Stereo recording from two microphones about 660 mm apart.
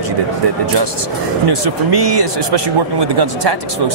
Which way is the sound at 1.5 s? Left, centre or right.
Right.